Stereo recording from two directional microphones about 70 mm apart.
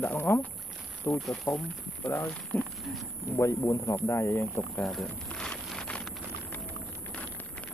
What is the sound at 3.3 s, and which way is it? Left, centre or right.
Speech, left.